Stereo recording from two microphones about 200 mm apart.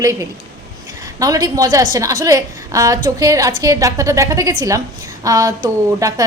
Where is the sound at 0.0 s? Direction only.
15° right (ahead or behind).